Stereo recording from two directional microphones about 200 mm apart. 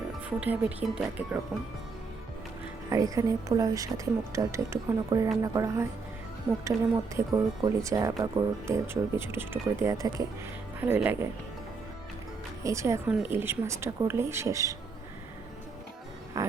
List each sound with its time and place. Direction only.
0.3 s a woman's voice: 5° right (ahead or behind)
2.9 s a woman's voice: 15° right (ahead or behind)
7.2 s a woman's voice: 15° right (ahead or behind)
12.6 s a woman's voice: 15° right (ahead or behind)
16.4 s a woman's voice: 15° right (ahead or behind)